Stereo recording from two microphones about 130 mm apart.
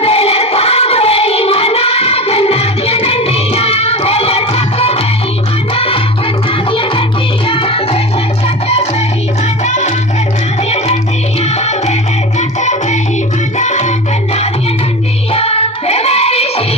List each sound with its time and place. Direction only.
0.0 s music: 50° left (ahead or behind)
9.6 s music: 60° left (ahead or behind)
15.3 s music: 50° left (ahead or behind)